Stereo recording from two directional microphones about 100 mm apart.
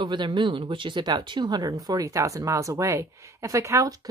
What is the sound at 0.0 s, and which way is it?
Speech, 50° right (ahead or behind).